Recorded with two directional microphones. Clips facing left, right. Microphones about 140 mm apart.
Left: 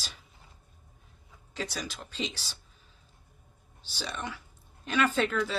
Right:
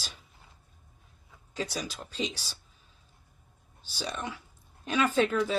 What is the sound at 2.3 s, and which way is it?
Speech, 40° right (ahead or behind).